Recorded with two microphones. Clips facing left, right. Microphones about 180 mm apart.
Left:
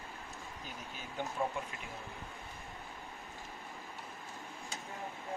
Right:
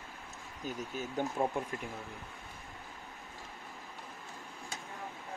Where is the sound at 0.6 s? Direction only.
45° right (ahead or behind).